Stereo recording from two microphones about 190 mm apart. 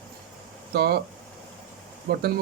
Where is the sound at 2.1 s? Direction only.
55° right (ahead or behind).